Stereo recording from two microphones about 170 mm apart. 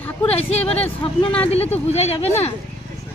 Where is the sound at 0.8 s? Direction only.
30° left (ahead or behind).